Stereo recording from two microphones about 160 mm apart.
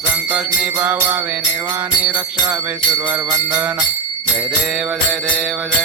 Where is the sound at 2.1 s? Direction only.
15° right (ahead or behind).